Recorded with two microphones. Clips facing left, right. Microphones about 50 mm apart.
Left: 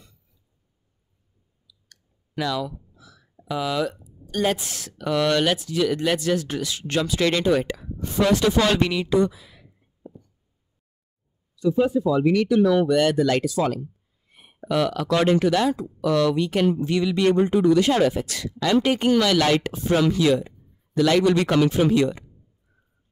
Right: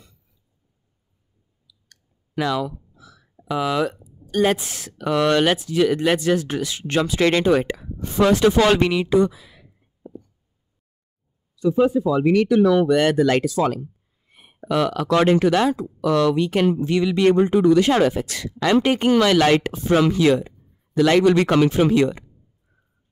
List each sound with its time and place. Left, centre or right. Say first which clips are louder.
1.9 s clicking: even; right
3.5 s speech: right 3 dB; right
11.5 s speech: right 3 dB; right
12.9 s a man's voice: right 2 dB; right